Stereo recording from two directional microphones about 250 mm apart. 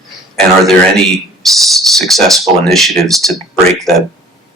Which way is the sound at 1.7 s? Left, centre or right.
Centre.